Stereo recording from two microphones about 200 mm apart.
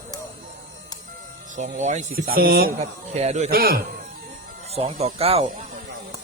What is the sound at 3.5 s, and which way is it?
Speech, 50° right (ahead or behind).